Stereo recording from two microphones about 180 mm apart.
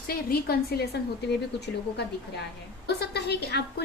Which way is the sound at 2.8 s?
65° left (ahead or behind).